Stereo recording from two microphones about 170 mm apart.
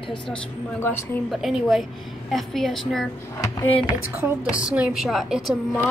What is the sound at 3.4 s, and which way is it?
Speech, 20° left (ahead or behind).